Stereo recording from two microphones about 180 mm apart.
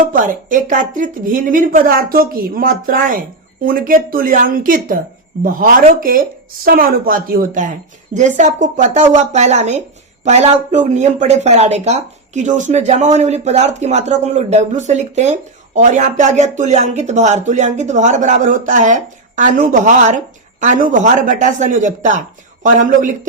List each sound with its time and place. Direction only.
0.1 s a woman's voice: 50° right (ahead or behind)